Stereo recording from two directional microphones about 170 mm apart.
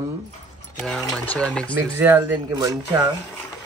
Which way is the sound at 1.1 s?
5° left (ahead or behind).